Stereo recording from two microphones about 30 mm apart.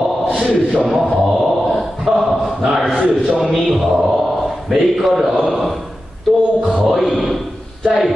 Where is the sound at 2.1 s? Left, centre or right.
Centre.